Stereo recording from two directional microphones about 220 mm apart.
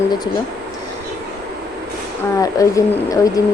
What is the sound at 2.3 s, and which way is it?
Speech, 15° left (ahead or behind).